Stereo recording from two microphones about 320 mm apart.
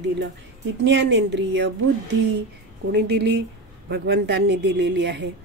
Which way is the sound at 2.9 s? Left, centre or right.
Right.